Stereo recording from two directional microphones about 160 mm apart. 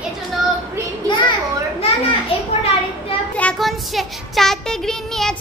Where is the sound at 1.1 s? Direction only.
30° left (ahead or behind).